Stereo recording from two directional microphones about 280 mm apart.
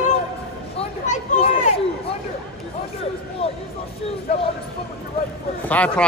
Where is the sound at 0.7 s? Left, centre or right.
Left.